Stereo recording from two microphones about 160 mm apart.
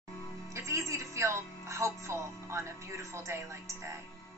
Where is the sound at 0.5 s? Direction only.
20° right (ahead or behind).